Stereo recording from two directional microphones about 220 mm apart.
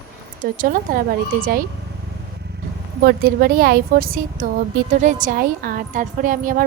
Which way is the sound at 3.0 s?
45° right (ahead or behind).